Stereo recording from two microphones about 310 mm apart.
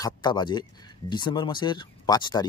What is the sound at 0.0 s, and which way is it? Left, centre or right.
Speech, centre.